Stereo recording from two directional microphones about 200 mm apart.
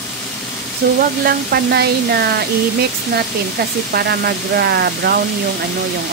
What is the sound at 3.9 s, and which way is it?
Speech, 55° right (ahead or behind).